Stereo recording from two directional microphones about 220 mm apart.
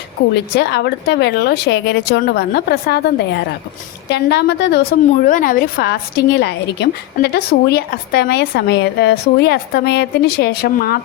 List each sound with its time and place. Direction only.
0.3 s a woman's voice: 50° left (ahead or behind)
4.1 s a woman's voice: 50° left (ahead or behind)